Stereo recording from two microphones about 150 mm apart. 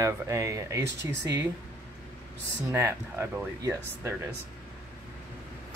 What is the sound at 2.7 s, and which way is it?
Speech, 20° right (ahead or behind).